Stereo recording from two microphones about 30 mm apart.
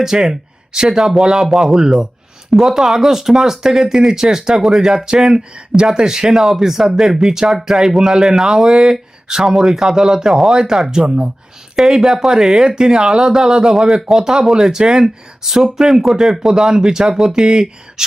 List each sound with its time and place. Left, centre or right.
0.0 s speech: centre
5.4 s speech: right
5.9 s speech: right
6.2 s speech: centre
14.5 s speech: right
16.6 s speech: right